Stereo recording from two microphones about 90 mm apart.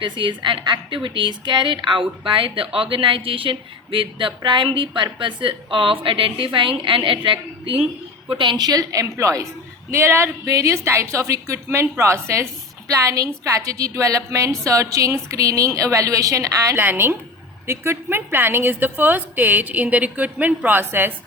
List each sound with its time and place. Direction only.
0.0 s a woman's voice: 65° right (ahead or behind); by 10.2 s 30° right (ahead or behind)
10.4 s a woman's voice: 40° right (ahead or behind)
16.8 s a woman's voice: 25° right (ahead or behind)